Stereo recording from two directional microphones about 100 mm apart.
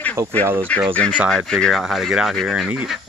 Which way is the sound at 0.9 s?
10° left (ahead or behind).